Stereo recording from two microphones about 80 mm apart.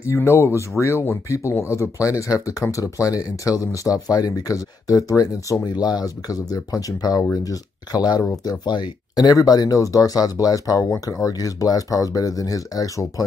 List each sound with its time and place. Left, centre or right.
0.0 s speech: left